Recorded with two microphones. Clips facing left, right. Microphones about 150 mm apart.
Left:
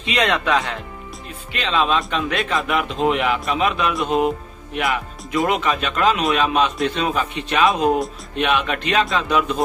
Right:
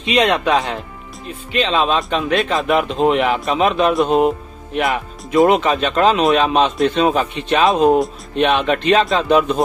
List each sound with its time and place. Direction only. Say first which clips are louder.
0.0 s speech: right 5 dB; 20° right (ahead or behind)
4.8 s speech: even; 25° right (ahead or behind)